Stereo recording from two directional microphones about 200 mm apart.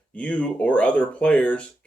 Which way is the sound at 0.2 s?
5° left (ahead or behind).